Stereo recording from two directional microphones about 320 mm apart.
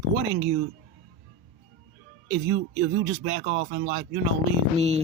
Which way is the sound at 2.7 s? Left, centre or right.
Right.